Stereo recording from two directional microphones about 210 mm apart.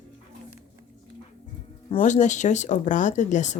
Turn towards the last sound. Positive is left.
turn(degrees=35)  # may be behind; listen again after turning